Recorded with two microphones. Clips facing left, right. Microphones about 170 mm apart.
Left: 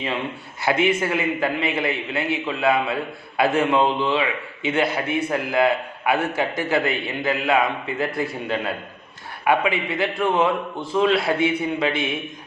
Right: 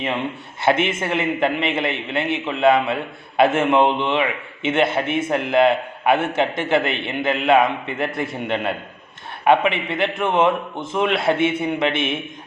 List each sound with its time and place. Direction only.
0.6 s a man's voice: 25° right (ahead or behind)